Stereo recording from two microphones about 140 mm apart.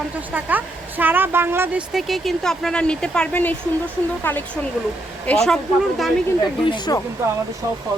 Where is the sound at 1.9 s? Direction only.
Centre (ahead or behind).